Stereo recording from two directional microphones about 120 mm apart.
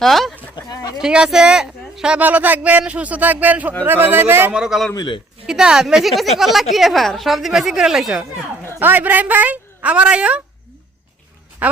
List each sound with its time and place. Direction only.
0.0 s a woman's voice: centre (ahead or behind)
0.5 s a sound: 30° left (ahead or behind)
1.0 s a man's voice: 5° right (ahead or behind)
4.5 s a woman's voice: 5° right (ahead or behind)
4.9 s a man's voice: 40° left (ahead or behind)
5.5 s a woman's voice: 5° right (ahead or behind)
8.8 s a man's voice: 15° right (ahead or behind)
11.6 s a man's voice: 10° right (ahead or behind)